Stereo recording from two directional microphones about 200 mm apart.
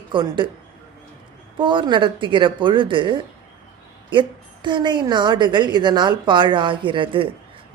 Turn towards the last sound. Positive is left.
turn(degrees=-25)  # may be behind; listen again after turning